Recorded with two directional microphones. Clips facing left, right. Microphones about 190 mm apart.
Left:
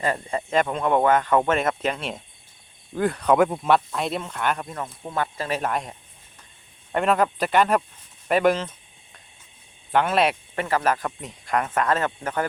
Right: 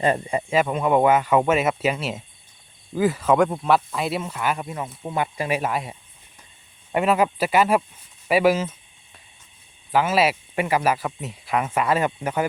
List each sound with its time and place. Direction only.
0.0 s speech: 20° right (ahead or behind)
9.9 s speech: 5° right (ahead or behind)